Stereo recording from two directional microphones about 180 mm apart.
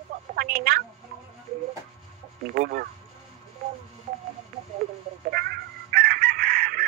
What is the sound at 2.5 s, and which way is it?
Speech, 55° right (ahead or behind).